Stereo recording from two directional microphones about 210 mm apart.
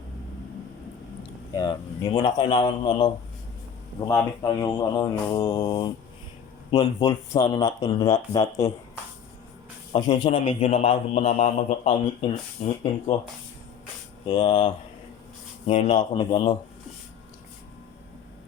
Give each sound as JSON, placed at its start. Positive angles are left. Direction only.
{"t": 1.5, "sound": "a man's voice", "side_deg": 20}
{"t": 4.1, "sound": "a man's voice", "side_deg": 15}
{"t": 9.9, "sound": "a man's voice", "side_deg": 20}
{"t": 14.3, "sound": "a man's voice", "side_deg": 20}